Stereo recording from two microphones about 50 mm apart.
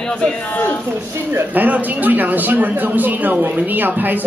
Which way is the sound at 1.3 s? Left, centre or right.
Right.